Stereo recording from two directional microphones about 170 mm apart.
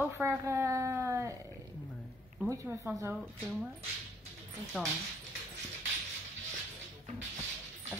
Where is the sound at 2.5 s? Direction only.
20° right (ahead or behind).